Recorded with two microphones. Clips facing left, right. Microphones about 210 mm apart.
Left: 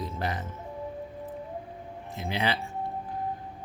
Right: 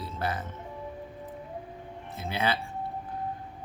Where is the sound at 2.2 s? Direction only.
20° left (ahead or behind).